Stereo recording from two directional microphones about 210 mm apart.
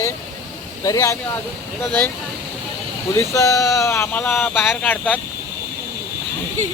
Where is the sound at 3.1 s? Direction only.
15° left (ahead or behind).